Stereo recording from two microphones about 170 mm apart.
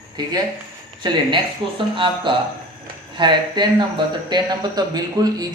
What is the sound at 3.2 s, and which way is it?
A man's voice, 25° right (ahead or behind).